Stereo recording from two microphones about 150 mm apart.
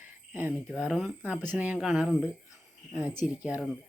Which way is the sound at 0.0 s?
15° right (ahead or behind).